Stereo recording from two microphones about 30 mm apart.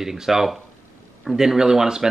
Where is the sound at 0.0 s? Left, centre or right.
Centre.